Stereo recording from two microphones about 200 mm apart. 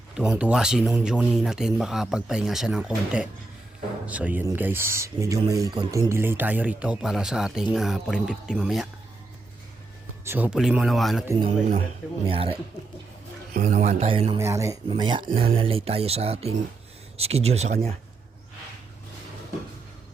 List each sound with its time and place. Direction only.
0.2 s speech: 5° right (ahead or behind)
10.2 s speech: 10° right (ahead or behind)
11.3 s speech: 25° right (ahead or behind)
13.5 s speech: 40° right (ahead or behind)
14.3 s speech: 15° right (ahead or behind); by 17.9 s 35° right (ahead or behind)